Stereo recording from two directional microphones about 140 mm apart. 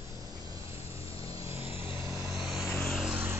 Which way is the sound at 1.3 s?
20° right (ahead or behind).